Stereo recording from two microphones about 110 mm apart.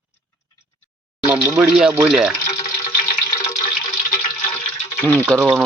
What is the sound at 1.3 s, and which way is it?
Speech, 20° right (ahead or behind).